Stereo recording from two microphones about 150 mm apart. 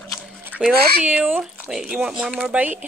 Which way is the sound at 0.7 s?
90° right.